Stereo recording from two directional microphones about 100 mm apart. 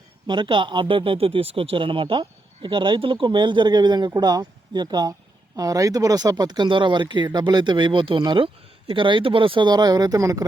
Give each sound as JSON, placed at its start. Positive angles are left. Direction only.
{"t": 0.3, "sound": "speech", "side_deg": -55}